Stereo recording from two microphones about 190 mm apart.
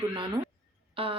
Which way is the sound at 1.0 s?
30° right (ahead or behind).